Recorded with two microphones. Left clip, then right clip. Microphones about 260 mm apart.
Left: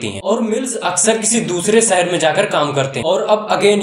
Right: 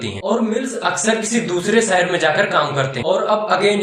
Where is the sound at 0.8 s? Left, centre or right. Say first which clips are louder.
Left 2 dB; left.